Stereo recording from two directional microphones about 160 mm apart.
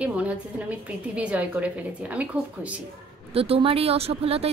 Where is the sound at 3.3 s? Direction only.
35° right (ahead or behind).